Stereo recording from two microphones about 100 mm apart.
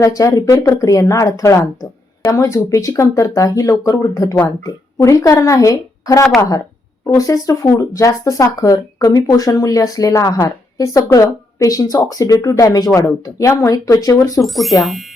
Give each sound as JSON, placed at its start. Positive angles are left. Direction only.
{"t": 0.0, "sound": "speech", "side_deg": 35}
{"t": 14.4, "sound": "speech", "side_deg": 0}